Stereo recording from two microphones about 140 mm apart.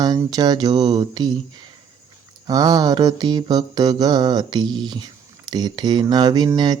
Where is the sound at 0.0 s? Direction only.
25° right (ahead or behind).